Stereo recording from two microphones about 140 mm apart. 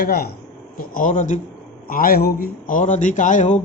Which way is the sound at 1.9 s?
90° left.